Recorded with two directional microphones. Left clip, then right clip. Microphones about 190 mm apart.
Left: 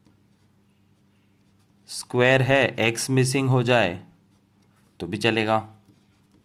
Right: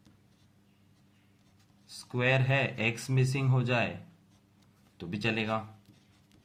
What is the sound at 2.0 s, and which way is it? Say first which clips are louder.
Speech: left 10 dB; 50° left (ahead or behind).